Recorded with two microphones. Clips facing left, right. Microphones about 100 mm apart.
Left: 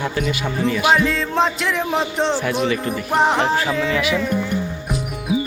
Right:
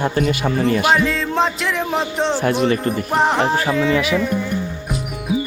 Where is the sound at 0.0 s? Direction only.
40° right (ahead or behind).